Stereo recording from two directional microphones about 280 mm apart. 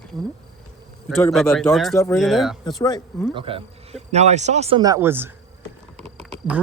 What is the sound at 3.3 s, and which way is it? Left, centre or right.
Speech, centre.